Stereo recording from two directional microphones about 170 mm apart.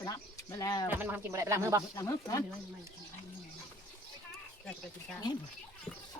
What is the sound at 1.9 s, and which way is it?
Speech, 20° left (ahead or behind).